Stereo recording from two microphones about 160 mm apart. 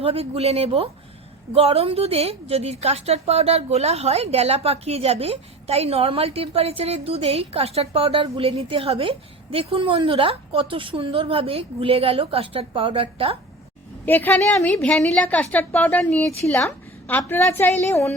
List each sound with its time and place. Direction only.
0.0 s a woman's voice: 40° right (ahead or behind)
14.0 s a woman's voice: 10° left (ahead or behind)